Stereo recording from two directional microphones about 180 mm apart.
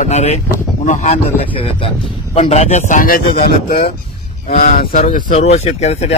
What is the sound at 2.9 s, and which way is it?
Speech, 50° left (ahead or behind).